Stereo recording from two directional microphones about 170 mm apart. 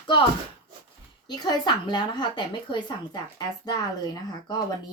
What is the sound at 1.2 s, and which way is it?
Speech, 25° left (ahead or behind).